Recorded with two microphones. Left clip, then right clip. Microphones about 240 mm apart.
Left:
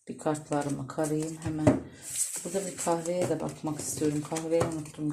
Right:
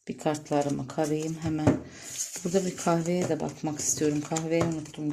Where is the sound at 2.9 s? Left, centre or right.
Right.